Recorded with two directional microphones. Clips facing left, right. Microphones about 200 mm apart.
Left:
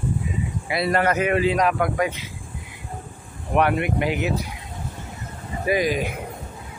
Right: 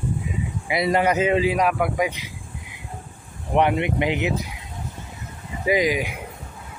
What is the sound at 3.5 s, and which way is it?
Speech, 20° right (ahead or behind).